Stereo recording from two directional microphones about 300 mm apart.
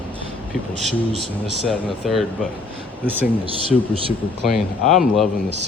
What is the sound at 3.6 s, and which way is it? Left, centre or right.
Speech, centre.